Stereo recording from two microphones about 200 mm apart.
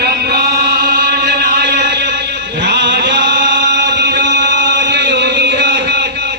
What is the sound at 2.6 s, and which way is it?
Chant, 60° right (ahead or behind).